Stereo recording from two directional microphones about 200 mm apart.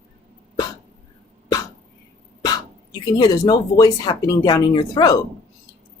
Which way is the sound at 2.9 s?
20° left (ahead or behind).